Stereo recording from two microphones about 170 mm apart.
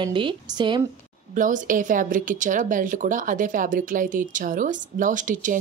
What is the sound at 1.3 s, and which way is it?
A woman's voice, 50° right (ahead or behind).